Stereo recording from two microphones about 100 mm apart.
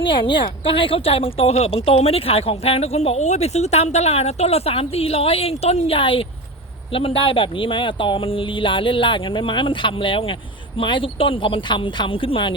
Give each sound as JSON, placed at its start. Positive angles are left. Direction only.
{"t": 0.0, "sound": "speech", "side_deg": 55}